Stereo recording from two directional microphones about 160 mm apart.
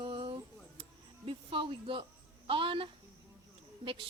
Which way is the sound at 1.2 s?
35° right (ahead or behind).